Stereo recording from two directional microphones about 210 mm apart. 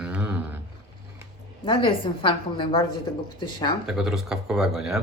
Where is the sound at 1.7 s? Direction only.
25° left (ahead or behind).